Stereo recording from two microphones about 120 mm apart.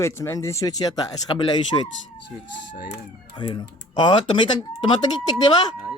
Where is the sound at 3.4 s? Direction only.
40° left (ahead or behind).